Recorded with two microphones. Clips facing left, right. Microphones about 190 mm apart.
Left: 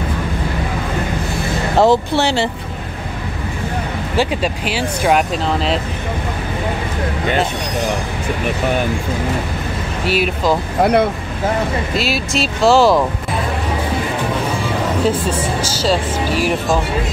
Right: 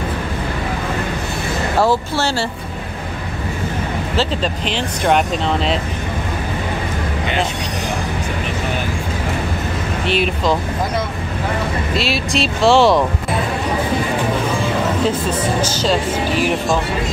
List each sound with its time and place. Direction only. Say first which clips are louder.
1.8 s speech: left 4 dB; 20° left (ahead or behind)
4.2 s speech: left 3 dB; 10° left (ahead or behind)
10.0 s speech: left 2 dB; 5° left (ahead or behind)
10.8 s speech: left 8 dB; 65° left (ahead or behind)
12.0 s speech: right 2 dB; centre (ahead or behind)
15.0 s speech: left 1 dB; 10° left (ahead or behind)